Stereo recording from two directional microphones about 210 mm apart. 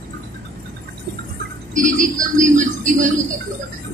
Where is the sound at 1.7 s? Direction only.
35° right (ahead or behind).